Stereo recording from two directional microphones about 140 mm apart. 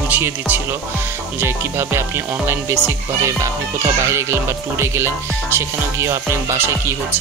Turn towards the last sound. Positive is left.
turn(degrees=-15)  # may be behind; listen again after turning